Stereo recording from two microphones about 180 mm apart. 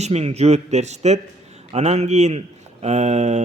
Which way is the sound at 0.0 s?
35° right (ahead or behind).